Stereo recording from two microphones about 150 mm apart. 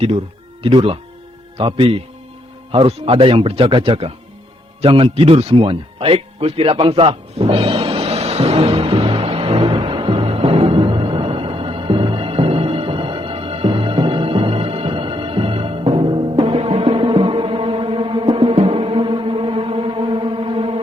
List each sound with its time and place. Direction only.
0.6 s speech: 40° right (ahead or behind)
4.8 s music: 40° right (ahead or behind)